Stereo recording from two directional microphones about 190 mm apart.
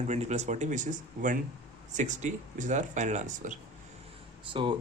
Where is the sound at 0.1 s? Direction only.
35° right (ahead or behind).